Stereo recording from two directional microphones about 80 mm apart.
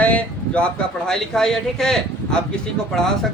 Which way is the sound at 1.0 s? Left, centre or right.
Centre.